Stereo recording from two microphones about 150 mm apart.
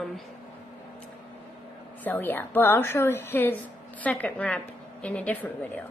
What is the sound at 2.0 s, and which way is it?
A woman's voice, 15° left (ahead or behind).